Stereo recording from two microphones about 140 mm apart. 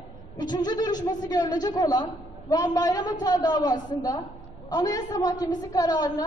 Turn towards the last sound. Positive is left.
turn(degrees=30)  # may be behind; listen again after turning